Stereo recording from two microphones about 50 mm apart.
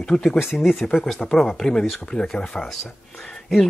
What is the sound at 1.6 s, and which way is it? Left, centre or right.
Speech, centre.